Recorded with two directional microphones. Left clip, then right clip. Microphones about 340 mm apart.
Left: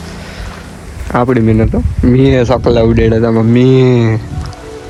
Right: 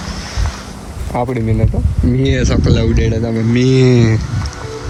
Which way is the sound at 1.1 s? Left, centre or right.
Left.